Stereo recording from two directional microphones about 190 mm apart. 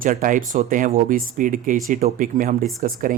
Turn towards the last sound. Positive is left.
turn(degrees=-50)  # may be behind; listen again after turning